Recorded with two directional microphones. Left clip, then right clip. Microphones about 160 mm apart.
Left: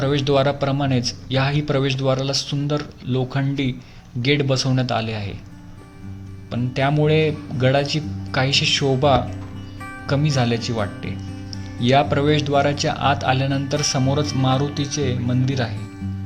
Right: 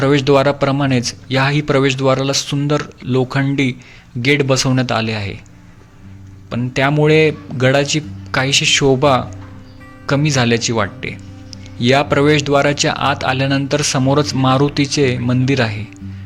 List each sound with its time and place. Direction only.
0.0 s speech: 20° right (ahead or behind)
6.5 s speech: 10° right (ahead or behind)